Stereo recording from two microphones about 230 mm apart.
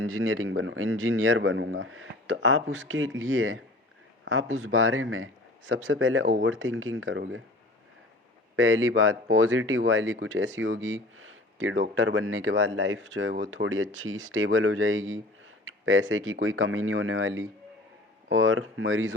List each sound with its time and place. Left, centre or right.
0.0 s speech: right
8.5 s speech: right